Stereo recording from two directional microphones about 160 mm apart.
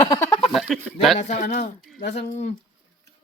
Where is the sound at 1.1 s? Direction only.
45° left (ahead or behind).